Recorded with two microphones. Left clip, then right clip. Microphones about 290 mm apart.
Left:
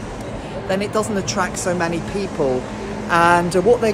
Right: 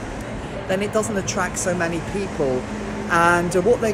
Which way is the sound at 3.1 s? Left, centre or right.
Centre.